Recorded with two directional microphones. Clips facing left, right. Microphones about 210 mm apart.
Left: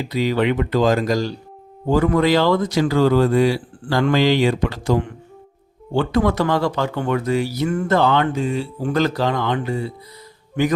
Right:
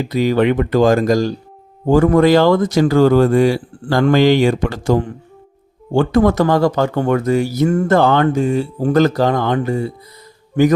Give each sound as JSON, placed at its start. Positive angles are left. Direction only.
{"t": 0.0, "sound": "speech", "side_deg": -50}